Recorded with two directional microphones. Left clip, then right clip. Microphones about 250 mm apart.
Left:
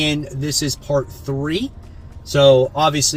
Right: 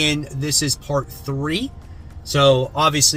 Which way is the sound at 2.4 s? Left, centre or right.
Centre.